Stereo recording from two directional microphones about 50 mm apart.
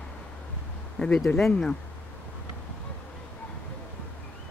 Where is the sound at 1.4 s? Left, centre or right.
Centre.